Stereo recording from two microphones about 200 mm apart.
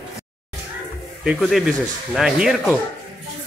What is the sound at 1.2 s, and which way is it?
Speech, centre (ahead or behind).